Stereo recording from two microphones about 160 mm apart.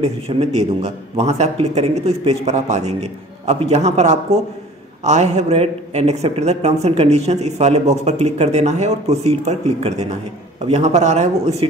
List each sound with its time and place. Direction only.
0.0 s speech: 40° right (ahead or behind)